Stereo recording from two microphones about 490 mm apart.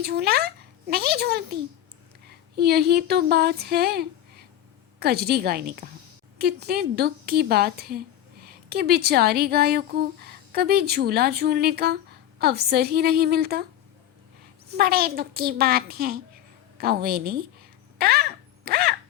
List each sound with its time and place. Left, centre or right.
0.0 s speech: centre
2.6 s speech: centre
14.7 s speech: centre
17.9 s a sound: centre